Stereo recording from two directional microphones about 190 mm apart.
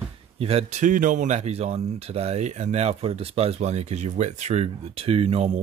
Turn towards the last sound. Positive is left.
turn(degrees=-30)  # may be behind; listen again after turning